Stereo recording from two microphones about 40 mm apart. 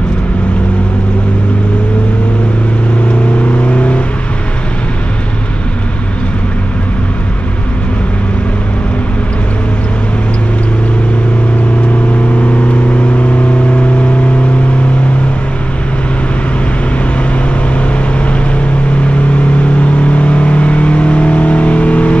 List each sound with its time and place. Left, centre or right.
3.6 s vehicle: left
19.8 s vehicle: left